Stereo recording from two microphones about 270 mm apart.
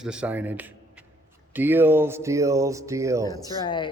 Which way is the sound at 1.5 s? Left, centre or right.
Centre.